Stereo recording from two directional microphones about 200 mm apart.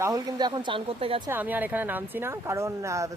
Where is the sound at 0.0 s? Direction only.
15° right (ahead or behind).